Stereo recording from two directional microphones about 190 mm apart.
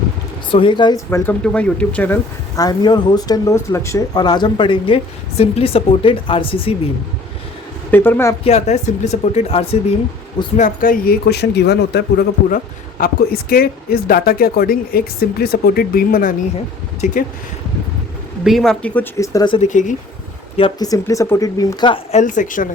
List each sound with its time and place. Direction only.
0.5 s speech: 25° left (ahead or behind)
1.4 s speech: 5° left (ahead or behind)
2.6 s speech: 20° left (ahead or behind)
7.9 s speech: 10° left (ahead or behind)
8.4 s speech: 35° left (ahead or behind)
10.6 s speech: 45° left (ahead or behind)
12.5 s speech: 50° left (ahead or behind)
17.0 s speech: 40° left (ahead or behind)
18.4 s speech: centre (ahead or behind); by 19.5 s 20° left (ahead or behind)
19.5 s speech: 40° left (ahead or behind)
20.6 s speech: 25° left (ahead or behind)
22.2 s speech: 40° left (ahead or behind)